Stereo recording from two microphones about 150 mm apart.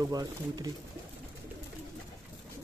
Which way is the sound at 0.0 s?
25° right (ahead or behind).